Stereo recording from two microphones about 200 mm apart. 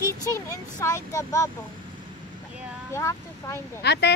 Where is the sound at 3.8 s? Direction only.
55° left (ahead or behind).